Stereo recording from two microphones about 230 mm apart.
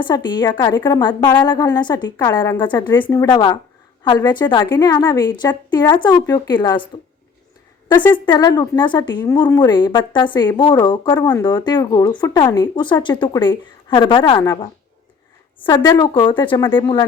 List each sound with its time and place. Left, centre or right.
0.0 s a woman's voice: centre
8.1 s a woman's voice: centre
15.7 s a woman's voice: centre